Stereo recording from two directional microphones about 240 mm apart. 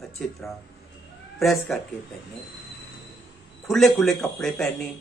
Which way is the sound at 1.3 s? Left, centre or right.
Centre.